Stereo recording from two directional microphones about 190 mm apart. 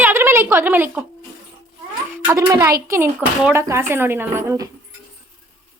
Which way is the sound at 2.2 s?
15° right (ahead or behind).